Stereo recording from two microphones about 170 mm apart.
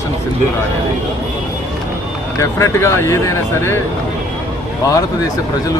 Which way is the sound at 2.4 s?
15° left (ahead or behind).